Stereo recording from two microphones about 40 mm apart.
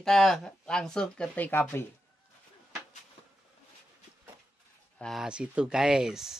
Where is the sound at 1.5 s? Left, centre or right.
Left.